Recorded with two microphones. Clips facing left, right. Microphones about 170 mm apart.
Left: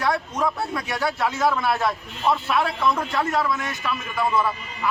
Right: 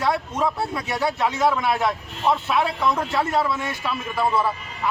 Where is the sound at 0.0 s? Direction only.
25° right (ahead or behind).